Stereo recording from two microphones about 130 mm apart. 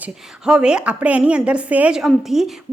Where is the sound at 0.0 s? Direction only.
5° right (ahead or behind).